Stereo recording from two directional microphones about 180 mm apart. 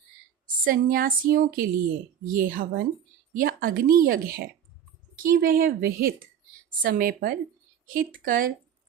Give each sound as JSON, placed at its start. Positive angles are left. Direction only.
{"t": 0.4, "sound": "a woman's voice", "side_deg": -50}